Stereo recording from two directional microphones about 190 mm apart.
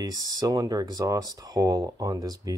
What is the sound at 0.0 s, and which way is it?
Speech, 20° right (ahead or behind).